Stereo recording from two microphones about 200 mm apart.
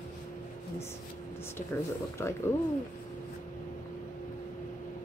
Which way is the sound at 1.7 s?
10° left (ahead or behind).